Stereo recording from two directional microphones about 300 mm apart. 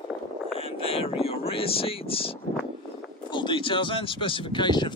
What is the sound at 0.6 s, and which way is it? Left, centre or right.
Vehicle, centre.